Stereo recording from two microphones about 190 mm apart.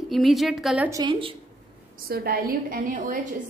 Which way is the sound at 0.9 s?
20° right (ahead or behind).